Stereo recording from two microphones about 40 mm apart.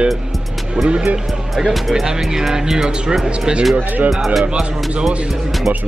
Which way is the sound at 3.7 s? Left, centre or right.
Right.